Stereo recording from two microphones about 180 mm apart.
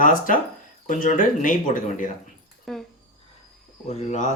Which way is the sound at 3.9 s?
40° left (ahead or behind).